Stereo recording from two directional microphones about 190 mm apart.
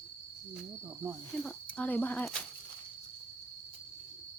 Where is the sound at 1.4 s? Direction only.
10° left (ahead or behind).